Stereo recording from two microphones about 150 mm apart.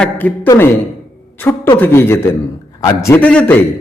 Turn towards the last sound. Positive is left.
turn(degrees=10)  # may be behind; listen again after turning